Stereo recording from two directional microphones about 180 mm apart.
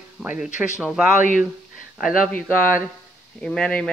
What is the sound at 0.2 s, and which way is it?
Speech, 10° right (ahead or behind).